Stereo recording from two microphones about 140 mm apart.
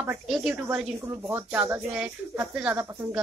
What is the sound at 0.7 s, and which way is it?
Speech, 15° right (ahead or behind).